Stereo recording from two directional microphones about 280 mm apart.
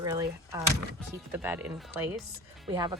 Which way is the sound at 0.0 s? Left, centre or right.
Centre.